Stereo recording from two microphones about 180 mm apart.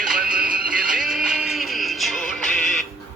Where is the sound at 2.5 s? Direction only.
45° right (ahead or behind).